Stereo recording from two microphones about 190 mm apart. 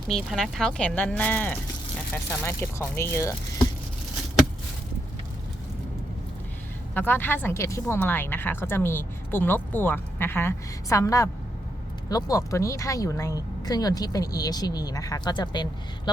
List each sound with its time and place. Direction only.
0.1 s speech: centre (ahead or behind)
6.9 s speech: 10° left (ahead or behind)